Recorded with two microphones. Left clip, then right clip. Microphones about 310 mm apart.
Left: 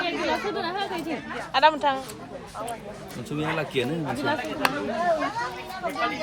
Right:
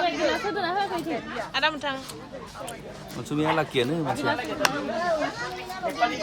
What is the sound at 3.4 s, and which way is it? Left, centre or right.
Speech, right.